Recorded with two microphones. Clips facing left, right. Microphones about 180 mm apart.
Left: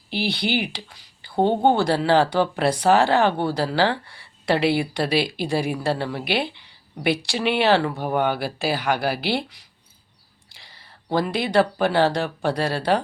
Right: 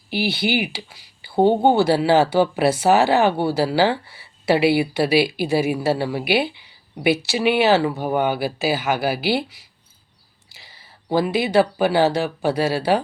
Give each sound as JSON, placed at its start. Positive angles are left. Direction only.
{"t": 0.1, "sound": "speech", "side_deg": -5}